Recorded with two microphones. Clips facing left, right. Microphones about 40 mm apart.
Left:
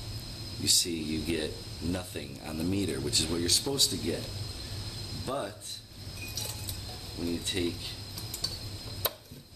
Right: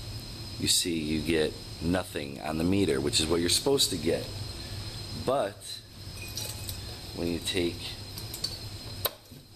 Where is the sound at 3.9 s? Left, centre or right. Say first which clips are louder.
Right 5 dB; centre.